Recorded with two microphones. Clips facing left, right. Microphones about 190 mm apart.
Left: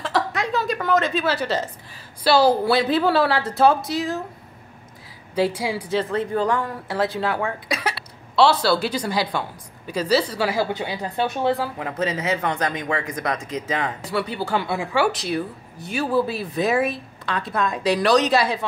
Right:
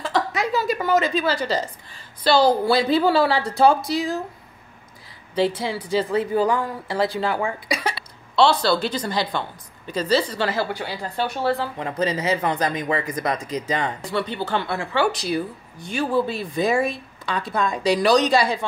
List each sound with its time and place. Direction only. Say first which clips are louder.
0.0 s a woman's voice: right 1 dB; centre (ahead or behind)
5.3 s a woman's voice: even; 10° left (ahead or behind)
5.9 s speech: right 3 dB; 5° right (ahead or behind)
10.7 s a woman's voice: left 2 dB; 20° left (ahead or behind)
11.7 s speech: right 1 dB; 5° left (ahead or behind)